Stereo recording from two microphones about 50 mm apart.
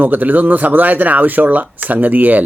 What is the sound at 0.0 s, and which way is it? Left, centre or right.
Speech, right.